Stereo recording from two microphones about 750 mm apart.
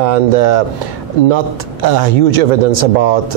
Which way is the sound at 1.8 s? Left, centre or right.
Right.